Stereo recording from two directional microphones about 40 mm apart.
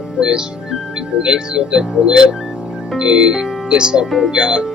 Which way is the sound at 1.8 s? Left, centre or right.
Centre.